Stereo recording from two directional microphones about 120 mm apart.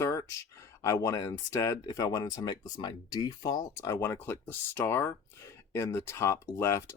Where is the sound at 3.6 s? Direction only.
25° left (ahead or behind).